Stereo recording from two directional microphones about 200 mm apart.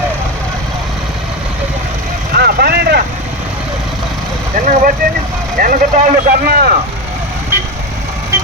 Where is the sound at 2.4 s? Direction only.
50° right (ahead or behind).